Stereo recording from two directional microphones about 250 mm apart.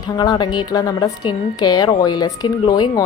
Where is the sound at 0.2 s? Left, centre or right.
Centre.